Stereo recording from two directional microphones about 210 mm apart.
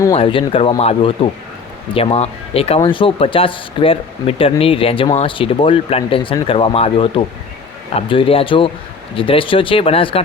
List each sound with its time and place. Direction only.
0.0 s speech: 25° left (ahead or behind)